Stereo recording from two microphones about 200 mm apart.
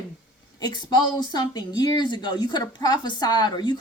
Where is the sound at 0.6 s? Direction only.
20° left (ahead or behind).